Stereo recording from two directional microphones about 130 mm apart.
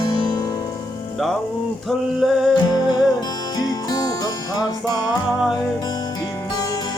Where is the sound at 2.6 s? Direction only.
35° left (ahead or behind).